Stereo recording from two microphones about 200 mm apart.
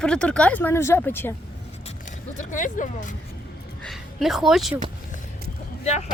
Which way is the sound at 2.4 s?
40° left (ahead or behind).